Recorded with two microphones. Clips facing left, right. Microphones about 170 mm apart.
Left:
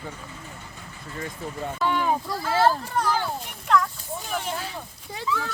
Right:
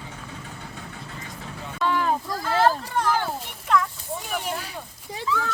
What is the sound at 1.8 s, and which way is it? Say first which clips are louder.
Speech: right 1 dB; 15° left (ahead or behind).